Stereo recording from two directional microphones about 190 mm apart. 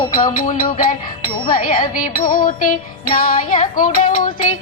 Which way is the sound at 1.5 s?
45° left (ahead or behind).